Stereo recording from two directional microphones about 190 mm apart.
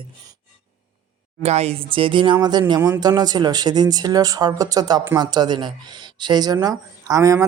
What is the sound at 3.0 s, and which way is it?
Speech, 20° right (ahead or behind).